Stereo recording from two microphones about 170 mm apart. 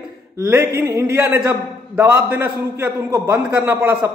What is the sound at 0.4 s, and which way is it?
A man's voice, 15° right (ahead or behind).